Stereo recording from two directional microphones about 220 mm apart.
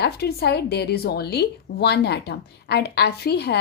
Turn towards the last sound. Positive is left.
turn(degrees=45)  # may be behind; listen again after turning